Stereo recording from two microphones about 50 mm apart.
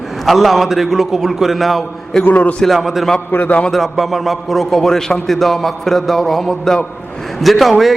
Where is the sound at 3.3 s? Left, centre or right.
Left.